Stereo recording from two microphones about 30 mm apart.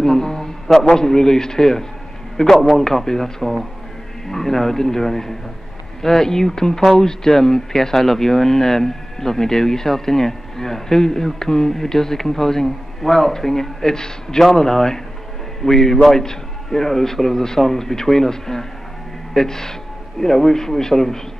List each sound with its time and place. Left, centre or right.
0.0 s a sound: centre
0.8 s speech: centre
2.5 s a man's voice: centre
2.8 s speech: centre